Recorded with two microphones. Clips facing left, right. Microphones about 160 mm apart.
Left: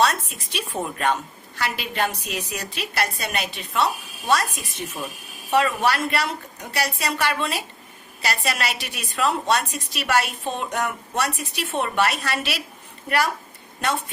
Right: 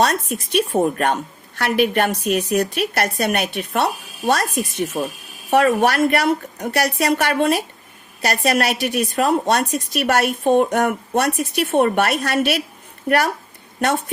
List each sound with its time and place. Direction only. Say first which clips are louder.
0.0 s a woman's voice: right 3 dB; 50° right (ahead or behind)